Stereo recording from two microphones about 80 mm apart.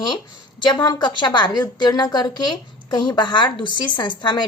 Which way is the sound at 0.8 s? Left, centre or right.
Left.